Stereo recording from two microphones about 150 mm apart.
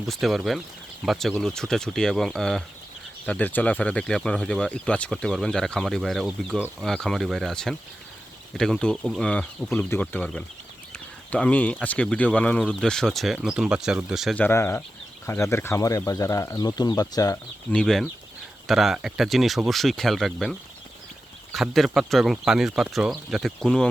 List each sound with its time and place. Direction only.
0.0 s speech: centre (ahead or behind)
14.3 s speech: 15° left (ahead or behind)
17.7 s speech: 5° left (ahead or behind)